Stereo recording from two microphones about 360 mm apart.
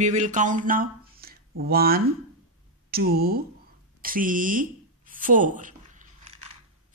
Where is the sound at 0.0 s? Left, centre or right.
Centre.